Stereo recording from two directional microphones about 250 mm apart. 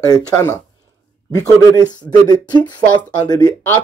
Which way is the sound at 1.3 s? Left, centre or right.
Centre.